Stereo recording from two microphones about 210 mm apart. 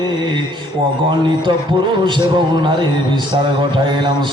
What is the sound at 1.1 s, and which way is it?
A man's voice, 20° right (ahead or behind).